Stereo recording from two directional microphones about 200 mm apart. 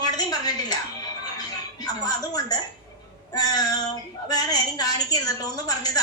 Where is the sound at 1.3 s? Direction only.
20° left (ahead or behind).